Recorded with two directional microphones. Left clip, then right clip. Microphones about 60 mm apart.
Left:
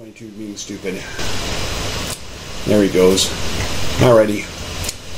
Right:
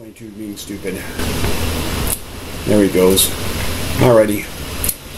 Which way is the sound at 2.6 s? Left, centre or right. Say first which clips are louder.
Even; centre.